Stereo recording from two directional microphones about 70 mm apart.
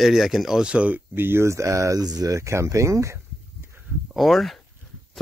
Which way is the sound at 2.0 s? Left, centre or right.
Right.